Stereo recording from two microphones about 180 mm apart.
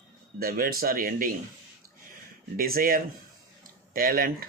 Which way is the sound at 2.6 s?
55° right (ahead or behind).